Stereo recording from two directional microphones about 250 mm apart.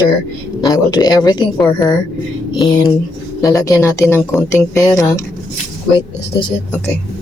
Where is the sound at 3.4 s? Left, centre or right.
Centre.